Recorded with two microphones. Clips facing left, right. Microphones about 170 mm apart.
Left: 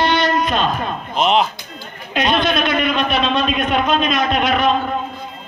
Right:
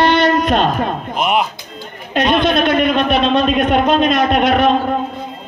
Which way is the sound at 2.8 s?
50° right (ahead or behind).